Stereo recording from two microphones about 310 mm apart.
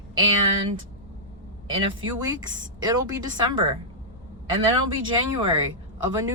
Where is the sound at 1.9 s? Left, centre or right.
Centre.